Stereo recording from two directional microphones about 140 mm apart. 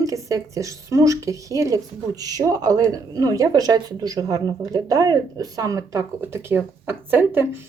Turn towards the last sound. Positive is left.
turn(degrees=-15)  # may be behind; listen again after turning